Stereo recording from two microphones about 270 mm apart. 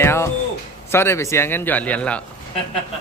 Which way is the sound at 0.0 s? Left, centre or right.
Centre.